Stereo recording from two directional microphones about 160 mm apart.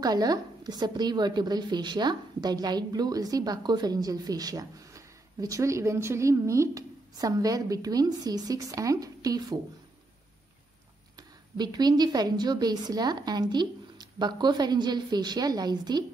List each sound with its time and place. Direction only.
0.0 s a woman's voice: 25° right (ahead or behind)
11.1 s a woman's voice: 25° right (ahead or behind)